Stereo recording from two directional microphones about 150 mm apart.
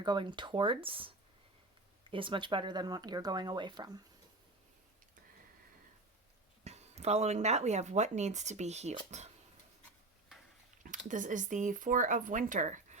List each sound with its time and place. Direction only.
0.0 s speech: 30° right (ahead or behind)
6.7 s speech: 45° right (ahead or behind)
10.8 s speech: 60° right (ahead or behind)